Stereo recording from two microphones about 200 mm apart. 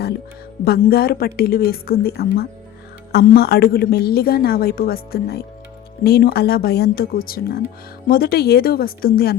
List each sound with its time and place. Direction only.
0.6 s a woman's voice: 50° left (ahead or behind)